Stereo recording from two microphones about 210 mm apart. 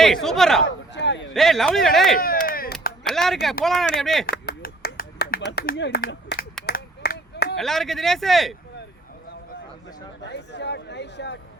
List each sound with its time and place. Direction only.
0.0 s speech: centre (ahead or behind)
0.9 s speech: 60° left (ahead or behind)
1.3 s speech: centre (ahead or behind)
2.1 s chop: 45° left (ahead or behind)
3.1 s speech: centre (ahead or behind)
4.3 s a sound: 45° left (ahead or behind)
7.5 s speech: centre (ahead or behind)
10.2 s speech: 55° left (ahead or behind)